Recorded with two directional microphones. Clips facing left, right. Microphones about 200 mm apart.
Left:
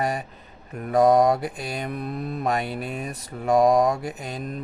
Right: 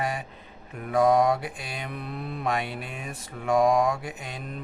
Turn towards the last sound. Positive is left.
turn(degrees=40)  # may be behind; listen again after turning